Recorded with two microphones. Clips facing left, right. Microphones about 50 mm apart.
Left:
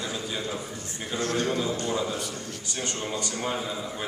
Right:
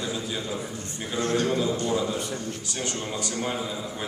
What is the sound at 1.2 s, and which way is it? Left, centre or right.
Speech, right.